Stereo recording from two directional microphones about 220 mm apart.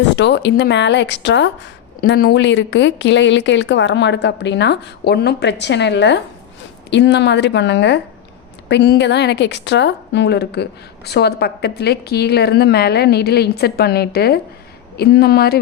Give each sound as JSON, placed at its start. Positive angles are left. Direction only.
{"t": 0.2, "sound": "a woman's voice", "side_deg": 55}